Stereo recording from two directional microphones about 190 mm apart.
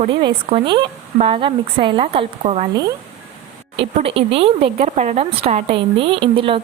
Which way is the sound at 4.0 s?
30° right (ahead or behind).